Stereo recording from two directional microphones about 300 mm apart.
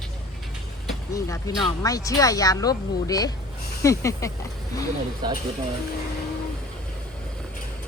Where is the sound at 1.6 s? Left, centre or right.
Centre.